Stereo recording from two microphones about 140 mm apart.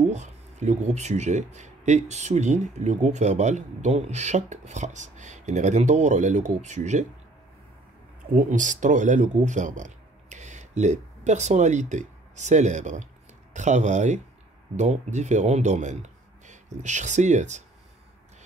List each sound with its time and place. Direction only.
0.0 s speech: 55° right (ahead or behind)
8.3 s speech: 65° right (ahead or behind)